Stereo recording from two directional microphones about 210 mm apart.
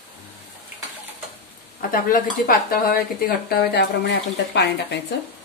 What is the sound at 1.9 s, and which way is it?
Speech, 45° left (ahead or behind).